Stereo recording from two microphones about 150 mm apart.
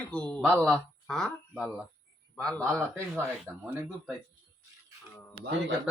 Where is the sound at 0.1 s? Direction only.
5° left (ahead or behind).